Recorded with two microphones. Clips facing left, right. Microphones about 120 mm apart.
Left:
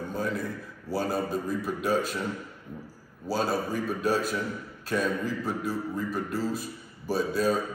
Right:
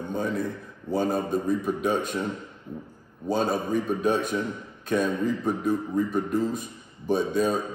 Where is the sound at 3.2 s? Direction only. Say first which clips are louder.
Right 3 dB; 5° left (ahead or behind).